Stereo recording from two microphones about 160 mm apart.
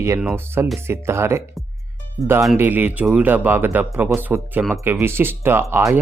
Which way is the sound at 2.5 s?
10° right (ahead or behind).